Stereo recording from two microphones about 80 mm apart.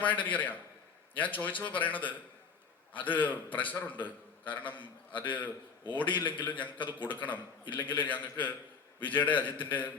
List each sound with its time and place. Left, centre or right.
0.0 s a man's voice: centre